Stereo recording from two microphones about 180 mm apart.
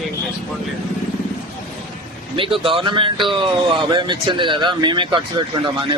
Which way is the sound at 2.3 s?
30° right (ahead or behind).